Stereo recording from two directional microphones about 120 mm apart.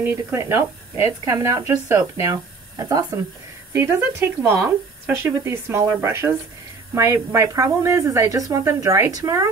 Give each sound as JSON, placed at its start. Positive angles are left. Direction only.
{"t": 0.0, "sound": "speech", "side_deg": -20}
{"t": 3.7, "sound": "speech", "side_deg": -20}